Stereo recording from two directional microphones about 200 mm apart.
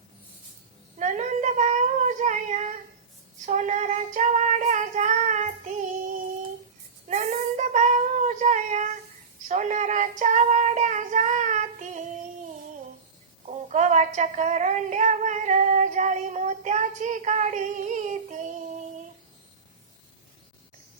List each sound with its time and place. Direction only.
0.9 s a sound: 35° right (ahead or behind)
3.4 s female singing: 35° right (ahead or behind)
7.1 s child singing: 35° right (ahead or behind)
13.5 s female singing: 35° right (ahead or behind)